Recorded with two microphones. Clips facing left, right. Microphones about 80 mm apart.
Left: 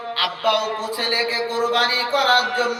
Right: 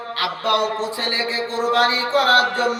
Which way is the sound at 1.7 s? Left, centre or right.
Right.